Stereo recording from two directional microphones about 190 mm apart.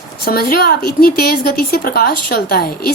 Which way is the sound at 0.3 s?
55° left (ahead or behind).